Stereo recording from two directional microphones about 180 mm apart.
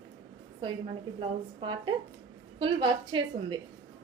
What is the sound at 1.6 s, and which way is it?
A woman's voice, 25° right (ahead or behind).